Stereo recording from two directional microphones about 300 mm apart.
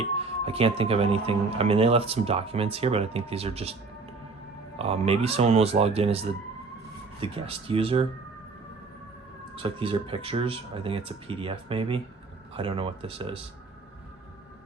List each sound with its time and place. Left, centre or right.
0.2 s speech: centre
4.8 s speech: centre
9.6 s speech: centre